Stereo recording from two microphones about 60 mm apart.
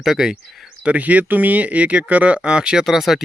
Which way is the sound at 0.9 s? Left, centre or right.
Right.